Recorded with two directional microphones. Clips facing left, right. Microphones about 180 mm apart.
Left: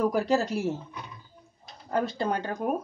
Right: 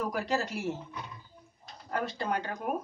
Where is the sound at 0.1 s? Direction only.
35° left (ahead or behind).